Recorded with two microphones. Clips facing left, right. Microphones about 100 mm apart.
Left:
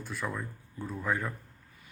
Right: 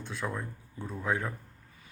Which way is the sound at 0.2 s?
10° right (ahead or behind).